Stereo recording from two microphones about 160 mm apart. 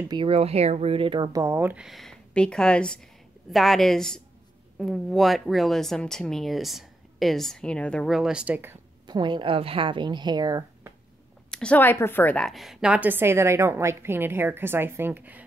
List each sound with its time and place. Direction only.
0.1 s speech: 35° right (ahead or behind); by 8.7 s 10° right (ahead or behind)
9.0 s speech: 25° right (ahead or behind)
11.5 s a woman's voice: 10° left (ahead or behind); by 15.4 s 10° right (ahead or behind)